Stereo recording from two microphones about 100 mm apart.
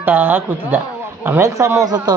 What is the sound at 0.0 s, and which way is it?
A man's voice, 20° right (ahead or behind).